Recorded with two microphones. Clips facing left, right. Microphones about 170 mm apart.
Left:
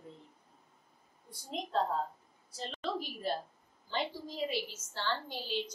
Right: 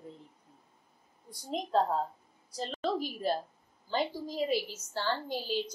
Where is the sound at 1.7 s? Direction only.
40° right (ahead or behind).